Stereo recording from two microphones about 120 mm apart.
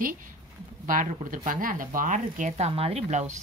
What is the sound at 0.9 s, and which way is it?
Speech, 90° right.